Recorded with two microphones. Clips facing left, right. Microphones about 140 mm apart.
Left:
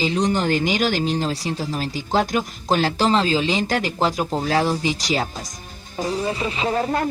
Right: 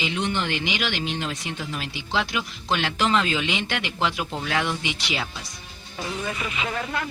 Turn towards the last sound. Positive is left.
turn(degrees=40)  # may be behind; listen again after turning